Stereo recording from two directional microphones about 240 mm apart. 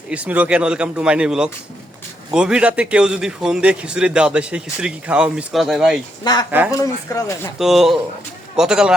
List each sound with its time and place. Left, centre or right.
0.1 s a man's voice: centre
6.3 s speech: centre
7.6 s a man's voice: centre